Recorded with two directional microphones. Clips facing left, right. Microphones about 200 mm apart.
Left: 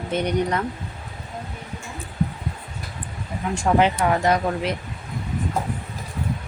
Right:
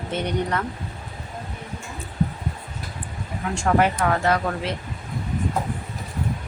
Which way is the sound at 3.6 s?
15° left (ahead or behind).